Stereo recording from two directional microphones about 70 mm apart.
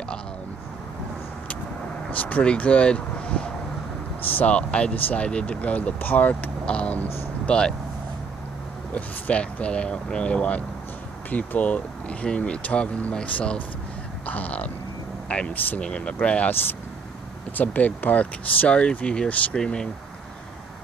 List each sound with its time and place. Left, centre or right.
2.0 s speech: left
8.9 s speech: centre
14.2 s a sound: left
15.2 s speech: centre
15.5 s speech: left
15.8 s speech: centre
17.6 s speech: left